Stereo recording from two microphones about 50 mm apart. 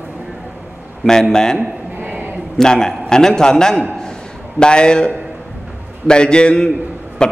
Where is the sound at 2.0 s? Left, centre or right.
Right.